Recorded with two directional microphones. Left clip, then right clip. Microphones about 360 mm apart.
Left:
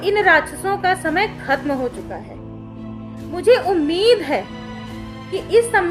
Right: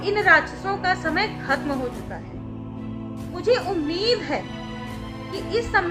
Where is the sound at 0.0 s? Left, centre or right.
Centre.